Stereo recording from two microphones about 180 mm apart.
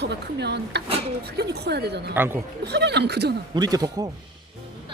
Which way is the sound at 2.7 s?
65° right (ahead or behind).